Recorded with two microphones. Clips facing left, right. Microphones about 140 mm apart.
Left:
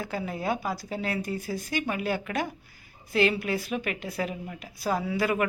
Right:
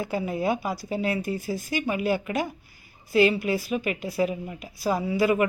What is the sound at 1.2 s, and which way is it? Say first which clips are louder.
Speech: right 3 dB; 45° left (ahead or behind).